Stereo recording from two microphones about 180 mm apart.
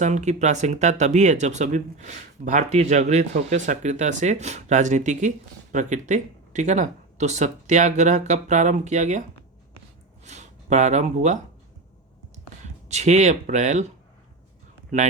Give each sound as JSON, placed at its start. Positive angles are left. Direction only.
{"t": 0.0, "sound": "speech", "side_deg": -40}
{"t": 10.2, "sound": "speech", "side_deg": -40}
{"t": 12.6, "sound": "speech", "side_deg": -40}